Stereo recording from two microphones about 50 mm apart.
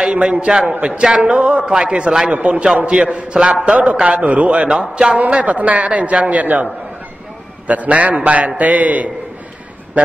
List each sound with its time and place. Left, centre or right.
0.1 s a man's voice: right
4.6 s speech: centre
5.1 s a man's voice: right